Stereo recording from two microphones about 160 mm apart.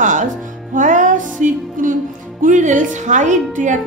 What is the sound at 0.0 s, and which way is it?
Music, 50° right (ahead or behind).